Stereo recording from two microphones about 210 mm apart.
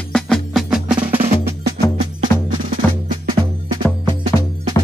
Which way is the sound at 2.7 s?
40° right (ahead or behind).